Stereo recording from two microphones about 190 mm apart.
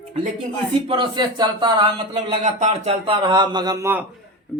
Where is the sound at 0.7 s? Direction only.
25° right (ahead or behind).